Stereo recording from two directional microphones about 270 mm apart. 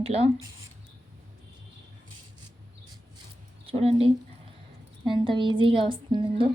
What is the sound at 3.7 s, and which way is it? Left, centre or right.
A woman's voice, right.